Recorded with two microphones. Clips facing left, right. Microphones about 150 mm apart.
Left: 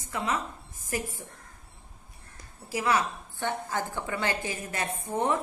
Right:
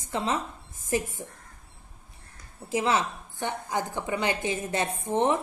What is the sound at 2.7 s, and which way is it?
A woman's voice, 25° right (ahead or behind).